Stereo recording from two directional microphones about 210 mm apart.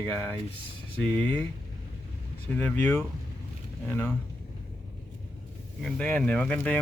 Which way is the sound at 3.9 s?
10° left (ahead or behind).